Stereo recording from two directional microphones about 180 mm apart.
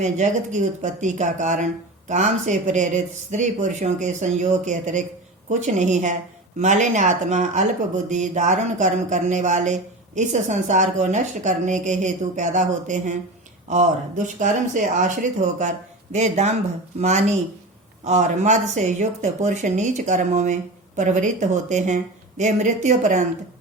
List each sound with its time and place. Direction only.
0.0 s speech: 40° right (ahead or behind)